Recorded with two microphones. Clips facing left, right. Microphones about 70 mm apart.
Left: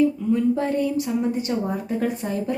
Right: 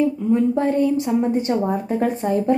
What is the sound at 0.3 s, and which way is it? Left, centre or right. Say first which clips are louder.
A woman's voice: right 6 dB; right.